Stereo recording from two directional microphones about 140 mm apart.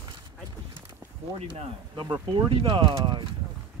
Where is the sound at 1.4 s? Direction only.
45° right (ahead or behind).